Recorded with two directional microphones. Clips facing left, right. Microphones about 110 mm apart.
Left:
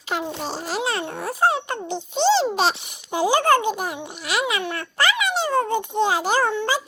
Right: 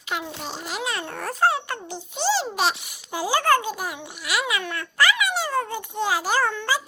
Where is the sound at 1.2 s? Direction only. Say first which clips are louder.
Even; 15° left (ahead or behind).